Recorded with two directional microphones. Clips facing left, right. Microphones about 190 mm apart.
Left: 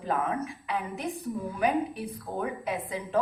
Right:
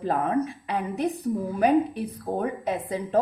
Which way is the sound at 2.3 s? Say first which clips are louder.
Right 4 dB; 35° right (ahead or behind).